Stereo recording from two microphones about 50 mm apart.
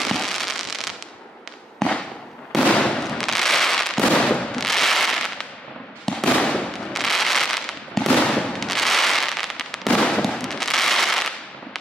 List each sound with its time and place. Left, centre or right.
0.0 s fireworks: centre
1.8 s fireworks: centre
4.6 s fireworks: centre
6.0 s fireworks: centre
6.9 s fireworks: centre
8.5 s fireworks: centre
9.8 s fireworks: centre